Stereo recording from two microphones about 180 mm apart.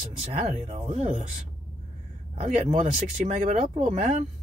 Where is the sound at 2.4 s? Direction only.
40° right (ahead or behind).